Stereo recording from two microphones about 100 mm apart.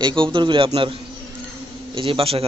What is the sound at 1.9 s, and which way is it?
Speech, 60° right (ahead or behind).